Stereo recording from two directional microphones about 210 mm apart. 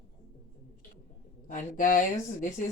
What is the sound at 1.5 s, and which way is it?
Speech, 40° left (ahead or behind).